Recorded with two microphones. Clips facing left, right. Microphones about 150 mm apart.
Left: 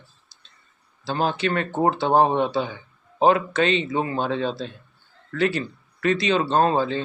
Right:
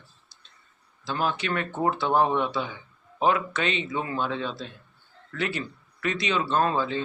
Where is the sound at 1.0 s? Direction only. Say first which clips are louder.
Left 5 dB; 30° left (ahead or behind).